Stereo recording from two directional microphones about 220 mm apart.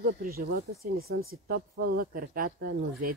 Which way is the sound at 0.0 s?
40° right (ahead or behind).